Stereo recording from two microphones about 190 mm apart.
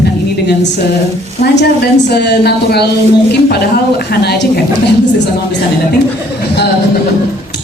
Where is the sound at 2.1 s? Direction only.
60° left (ahead or behind).